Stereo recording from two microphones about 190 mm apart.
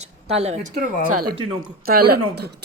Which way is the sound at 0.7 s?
50° right (ahead or behind).